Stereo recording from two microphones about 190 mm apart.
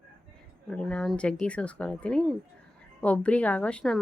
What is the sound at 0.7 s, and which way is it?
A woman's voice, 5° left (ahead or behind).